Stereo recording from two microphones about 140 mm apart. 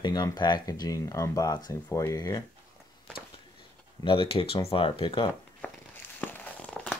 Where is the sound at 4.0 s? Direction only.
40° left (ahead or behind).